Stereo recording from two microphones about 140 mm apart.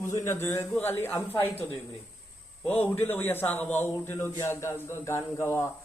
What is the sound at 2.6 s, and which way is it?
A man's voice, 10° left (ahead or behind).